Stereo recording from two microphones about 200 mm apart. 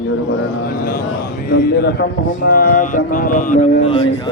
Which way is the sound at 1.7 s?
55° left (ahead or behind).